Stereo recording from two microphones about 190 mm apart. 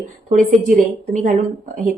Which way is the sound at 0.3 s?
40° right (ahead or behind).